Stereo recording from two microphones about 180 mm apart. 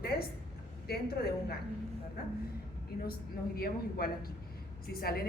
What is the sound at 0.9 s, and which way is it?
Speech, 60° left (ahead or behind).